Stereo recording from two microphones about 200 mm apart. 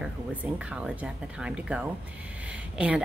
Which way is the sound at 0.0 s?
5° right (ahead or behind).